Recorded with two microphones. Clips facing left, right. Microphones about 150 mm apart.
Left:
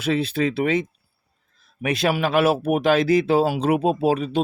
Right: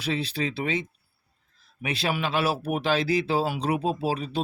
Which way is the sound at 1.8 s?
45° left (ahead or behind).